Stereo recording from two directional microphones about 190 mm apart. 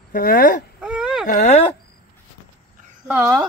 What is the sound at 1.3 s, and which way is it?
Speech, 35° left (ahead or behind).